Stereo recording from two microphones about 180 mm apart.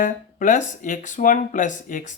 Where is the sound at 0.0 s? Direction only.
45° left (ahead or behind).